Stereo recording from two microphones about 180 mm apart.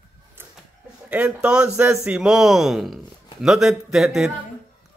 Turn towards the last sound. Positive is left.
turn(degrees=0)  # may be behind; listen again after turning